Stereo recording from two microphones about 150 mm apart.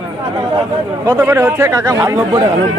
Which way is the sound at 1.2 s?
15° right (ahead or behind).